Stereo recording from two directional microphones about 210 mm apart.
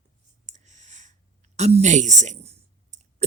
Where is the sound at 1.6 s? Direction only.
30° right (ahead or behind).